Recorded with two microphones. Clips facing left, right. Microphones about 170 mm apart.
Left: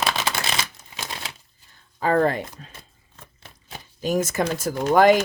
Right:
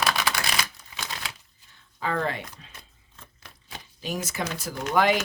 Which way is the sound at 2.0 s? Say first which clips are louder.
Left 8 dB; 45° left (ahead or behind).